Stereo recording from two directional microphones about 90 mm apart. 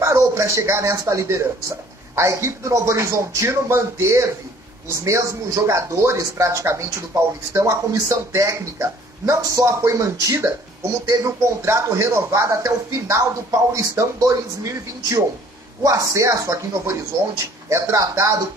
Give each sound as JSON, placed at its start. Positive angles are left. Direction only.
{"t": 0.0, "sound": "speech", "side_deg": -30}